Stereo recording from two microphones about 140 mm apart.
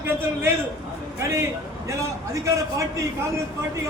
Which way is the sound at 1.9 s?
20° right (ahead or behind).